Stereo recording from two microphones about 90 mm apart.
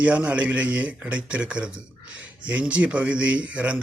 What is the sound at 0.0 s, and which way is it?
Speech, 15° right (ahead or behind).